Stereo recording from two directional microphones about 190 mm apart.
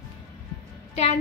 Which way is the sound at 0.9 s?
35° left (ahead or behind).